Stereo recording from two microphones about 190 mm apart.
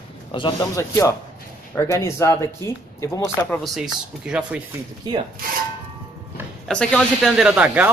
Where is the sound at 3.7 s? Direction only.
5° right (ahead or behind).